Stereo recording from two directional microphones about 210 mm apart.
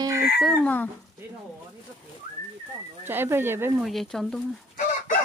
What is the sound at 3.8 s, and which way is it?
Speech, centre (ahead or behind).